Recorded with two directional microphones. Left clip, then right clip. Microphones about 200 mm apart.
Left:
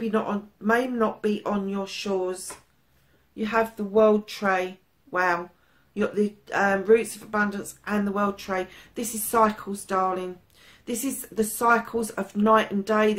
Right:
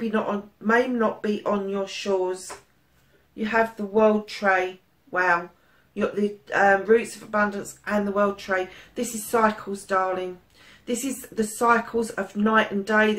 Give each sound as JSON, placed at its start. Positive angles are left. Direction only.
{"t": 0.7, "sound": "speech", "side_deg": 45}
{"t": 3.3, "sound": "speech", "side_deg": 45}